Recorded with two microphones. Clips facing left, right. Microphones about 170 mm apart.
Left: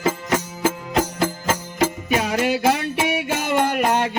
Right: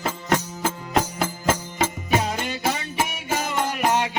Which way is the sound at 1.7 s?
70° left (ahead or behind).